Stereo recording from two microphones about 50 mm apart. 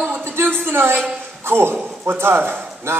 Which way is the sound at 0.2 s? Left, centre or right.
Right.